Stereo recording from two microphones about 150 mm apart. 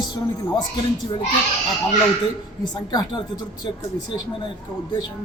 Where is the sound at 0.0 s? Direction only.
25° left (ahead or behind).